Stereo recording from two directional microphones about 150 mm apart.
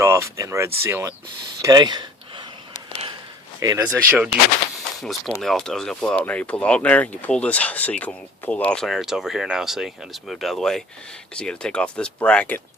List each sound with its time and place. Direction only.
0.0 s speech: 20° right (ahead or behind)
1.6 s a sound: 25° right (ahead or behind)
3.6 s speech: 25° right (ahead or behind)
3.9 s speech: 10° right (ahead or behind)
5.4 s speech: 5° left (ahead or behind)